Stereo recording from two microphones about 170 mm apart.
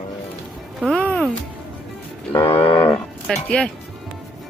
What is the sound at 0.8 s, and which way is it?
Speech, centre (ahead or behind).